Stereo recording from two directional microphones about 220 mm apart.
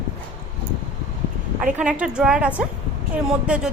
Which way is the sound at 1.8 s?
5° right (ahead or behind).